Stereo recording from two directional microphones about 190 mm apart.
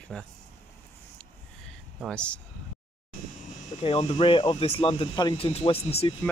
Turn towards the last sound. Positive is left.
turn(degrees=30)  # may be behind; listen again after turning